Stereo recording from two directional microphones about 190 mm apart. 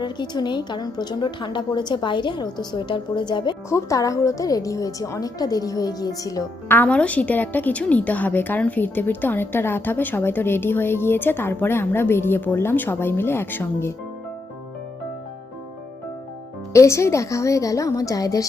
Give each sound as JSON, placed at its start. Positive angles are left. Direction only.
{"t": 0.0, "sound": "a woman's voice", "side_deg": 25}
{"t": 16.7, "sound": "a woman's voice", "side_deg": 15}